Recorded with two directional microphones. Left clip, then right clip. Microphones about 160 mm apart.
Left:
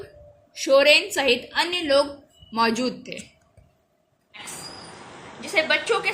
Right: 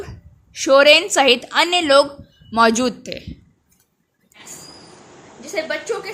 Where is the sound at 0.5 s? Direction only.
45° right (ahead or behind); by 3.2 s 65° right (ahead or behind).